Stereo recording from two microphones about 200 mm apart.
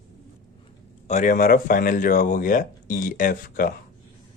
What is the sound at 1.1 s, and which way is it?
Speech, 40° left (ahead or behind).